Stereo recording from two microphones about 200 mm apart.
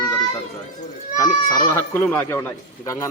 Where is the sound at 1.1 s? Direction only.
15° left (ahead or behind).